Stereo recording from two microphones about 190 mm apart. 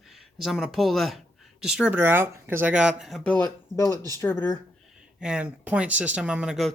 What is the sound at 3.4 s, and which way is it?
Speech, 20° left (ahead or behind).